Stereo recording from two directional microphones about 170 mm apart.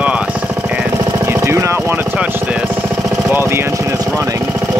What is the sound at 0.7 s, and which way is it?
Jackhammer, 10° right (ahead or behind).